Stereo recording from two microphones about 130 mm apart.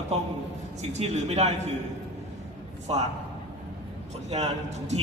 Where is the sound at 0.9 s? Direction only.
55° right (ahead or behind).